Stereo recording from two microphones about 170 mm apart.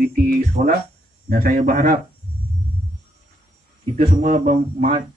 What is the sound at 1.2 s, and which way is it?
Speech, 55° right (ahead or behind).